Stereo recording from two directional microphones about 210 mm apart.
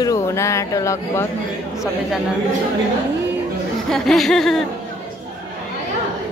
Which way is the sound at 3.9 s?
Centre (ahead or behind).